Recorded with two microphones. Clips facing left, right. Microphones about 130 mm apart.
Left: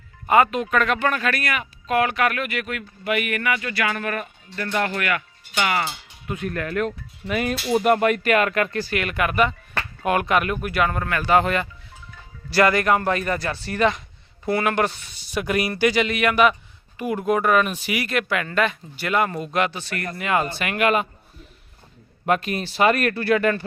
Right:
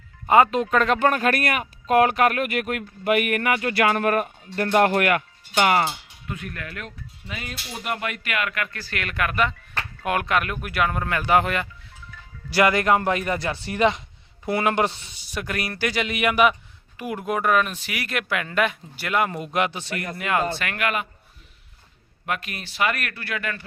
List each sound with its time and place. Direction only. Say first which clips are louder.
0.3 s speech: right 1 dB; 25° right (ahead or behind)
0.9 s speech: right 3 dB; 45° right (ahead or behind)
6.2 s speech: left 6 dB; 20° left (ahead or behind)
6.5 s speech: left 11 dB; 45° left (ahead or behind); by 7.8 s 70° left (ahead or behind)
7.8 s speech: left 10 dB; 45° left (ahead or behind)
8.9 s speech: left 4 dB; 5° left (ahead or behind)
11.0 s speech: left 1 dB; 15° right (ahead or behind)
12.5 s speech: left 1 dB; 15° right (ahead or behind)
15.3 s speech: left 6 dB; 10° left (ahead or behind)
16.1 s speech: left 1 dB; 10° right (ahead or behind)
20.1 s speech: left 1 dB; centre (ahead or behind)
20.6 s speech: left 4 dB; 15° left (ahead or behind)
20.8 s a man's voice: left 6 dB; 30° left (ahead or behind)
22.3 s speech: left 8 dB; 30° left (ahead or behind)